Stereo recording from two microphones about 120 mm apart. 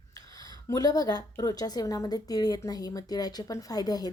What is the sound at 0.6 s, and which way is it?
A woman's voice, 30° left (ahead or behind).